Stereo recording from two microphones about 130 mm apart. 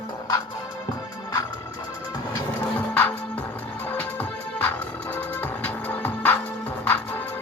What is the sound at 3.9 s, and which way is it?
Music, 10° left (ahead or behind).